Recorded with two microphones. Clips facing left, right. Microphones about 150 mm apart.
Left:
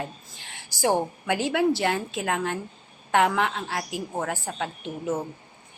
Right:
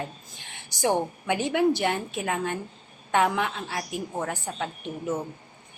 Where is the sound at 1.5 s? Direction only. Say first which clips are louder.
Right 1 dB; 15° right (ahead or behind).